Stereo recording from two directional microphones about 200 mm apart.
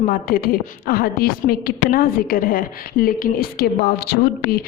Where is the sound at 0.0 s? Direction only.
45° left (ahead or behind).